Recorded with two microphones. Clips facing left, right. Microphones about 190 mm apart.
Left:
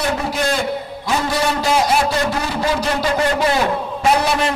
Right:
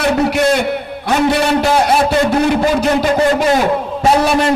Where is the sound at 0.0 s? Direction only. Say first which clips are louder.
Right 7 dB; 70° right (ahead or behind).